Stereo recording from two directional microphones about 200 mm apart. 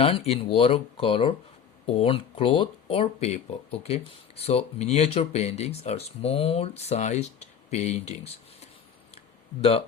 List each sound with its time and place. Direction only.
0.0 s speech: 30° left (ahead or behind)